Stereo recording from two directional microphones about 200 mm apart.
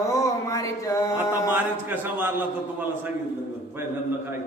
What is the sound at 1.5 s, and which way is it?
Speech, 10° right (ahead or behind).